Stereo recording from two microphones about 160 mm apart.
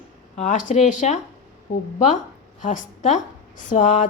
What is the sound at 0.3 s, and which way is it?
Speech, 50° left (ahead or behind).